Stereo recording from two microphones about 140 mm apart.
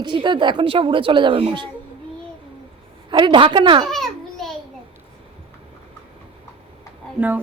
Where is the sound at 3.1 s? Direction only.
35° right (ahead or behind).